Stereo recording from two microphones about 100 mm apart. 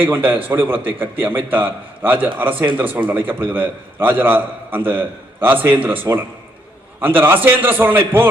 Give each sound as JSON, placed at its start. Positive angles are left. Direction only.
{"t": 0.4, "sound": "a man's voice", "side_deg": -20}